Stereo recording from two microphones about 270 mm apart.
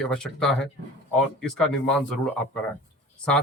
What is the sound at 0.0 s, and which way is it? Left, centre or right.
Speech, centre.